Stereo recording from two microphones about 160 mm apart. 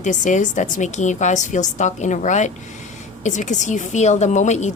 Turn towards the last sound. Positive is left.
turn(degrees=45)  # may be behind; listen again after turning